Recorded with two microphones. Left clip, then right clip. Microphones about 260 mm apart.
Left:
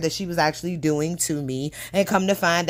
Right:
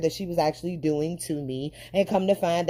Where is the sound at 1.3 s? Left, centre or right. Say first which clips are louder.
Left 3 dB; left.